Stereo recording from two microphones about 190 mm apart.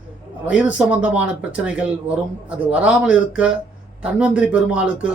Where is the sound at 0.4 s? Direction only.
5° right (ahead or behind).